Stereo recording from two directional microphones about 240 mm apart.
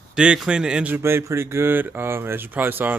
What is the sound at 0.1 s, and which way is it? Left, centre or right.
Speech, centre.